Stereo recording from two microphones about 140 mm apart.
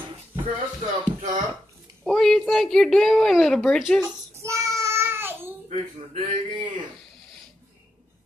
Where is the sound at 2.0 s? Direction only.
5° left (ahead or behind).